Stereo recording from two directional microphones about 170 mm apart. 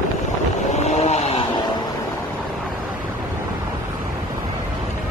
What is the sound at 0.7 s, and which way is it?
Vehicle, 40° left (ahead or behind).